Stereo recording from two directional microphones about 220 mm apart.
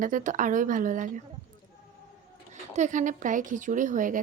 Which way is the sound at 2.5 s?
35° right (ahead or behind).